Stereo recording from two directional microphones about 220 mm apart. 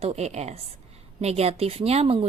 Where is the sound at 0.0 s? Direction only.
30° right (ahead or behind).